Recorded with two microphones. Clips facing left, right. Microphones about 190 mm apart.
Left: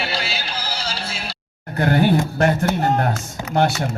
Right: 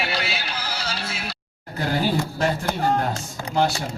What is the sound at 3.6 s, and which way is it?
Speech, 60° left (ahead or behind).